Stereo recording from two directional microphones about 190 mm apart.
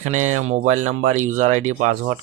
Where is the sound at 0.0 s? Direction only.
40° right (ahead or behind).